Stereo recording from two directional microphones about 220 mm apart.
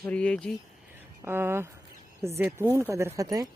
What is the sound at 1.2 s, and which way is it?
Speech, 10° right (ahead or behind).